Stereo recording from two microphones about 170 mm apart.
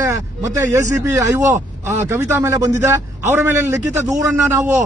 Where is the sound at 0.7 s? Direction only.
15° right (ahead or behind).